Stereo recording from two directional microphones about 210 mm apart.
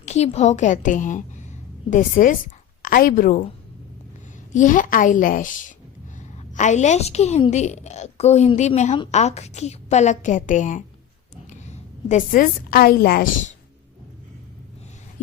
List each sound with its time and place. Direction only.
0.0 s a woman's voice: 30° left (ahead or behind)
4.5 s a woman's voice: 40° left (ahead or behind)